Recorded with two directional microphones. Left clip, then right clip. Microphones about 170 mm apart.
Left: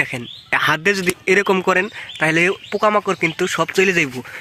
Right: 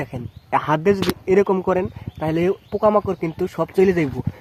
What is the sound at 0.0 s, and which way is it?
Speech, 10° left (ahead or behind).